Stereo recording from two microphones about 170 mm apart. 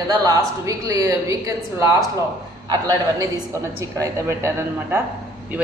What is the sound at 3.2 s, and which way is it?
A woman's voice, 20° right (ahead or behind).